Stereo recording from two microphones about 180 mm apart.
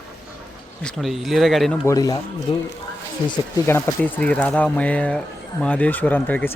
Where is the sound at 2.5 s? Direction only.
30° left (ahead or behind).